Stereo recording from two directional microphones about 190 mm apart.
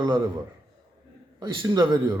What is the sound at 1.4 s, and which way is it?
Speech, 20° right (ahead or behind).